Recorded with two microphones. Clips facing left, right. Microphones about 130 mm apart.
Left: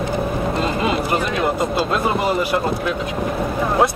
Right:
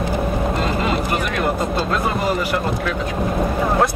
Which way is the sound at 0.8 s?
20° left (ahead or behind).